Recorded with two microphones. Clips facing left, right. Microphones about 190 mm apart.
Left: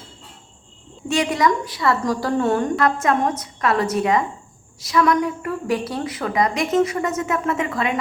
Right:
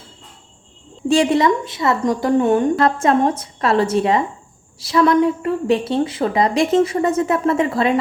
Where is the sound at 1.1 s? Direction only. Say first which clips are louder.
Right 5 dB; 30° right (ahead or behind).